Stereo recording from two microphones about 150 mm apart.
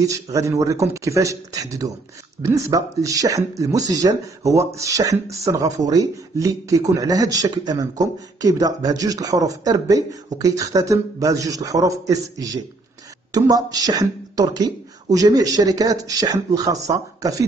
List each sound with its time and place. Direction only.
0.0 s speech: 20° right (ahead or behind)